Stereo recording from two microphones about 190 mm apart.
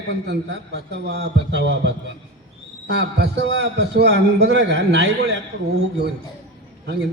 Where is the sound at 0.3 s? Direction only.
65° right (ahead or behind).